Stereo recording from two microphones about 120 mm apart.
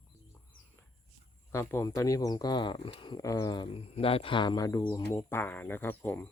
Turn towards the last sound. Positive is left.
turn(degrees=15)  # may be behind; listen again after turning